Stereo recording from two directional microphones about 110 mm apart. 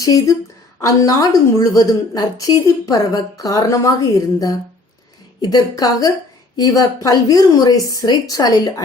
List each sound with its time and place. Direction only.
0.0 s a woman's voice: 35° left (ahead or behind)